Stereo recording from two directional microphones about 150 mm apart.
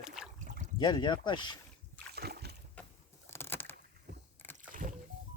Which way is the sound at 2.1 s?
90° right.